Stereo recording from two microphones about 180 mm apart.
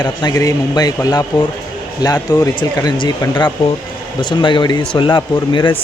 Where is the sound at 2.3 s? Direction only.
20° left (ahead or behind).